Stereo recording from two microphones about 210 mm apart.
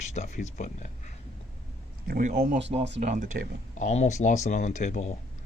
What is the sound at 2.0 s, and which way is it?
Speech, 40° right (ahead or behind).